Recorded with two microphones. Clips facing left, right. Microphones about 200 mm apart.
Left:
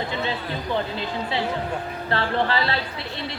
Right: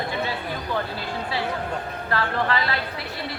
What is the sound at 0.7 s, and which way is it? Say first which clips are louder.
Speech: left 3 dB; 20° left (ahead or behind).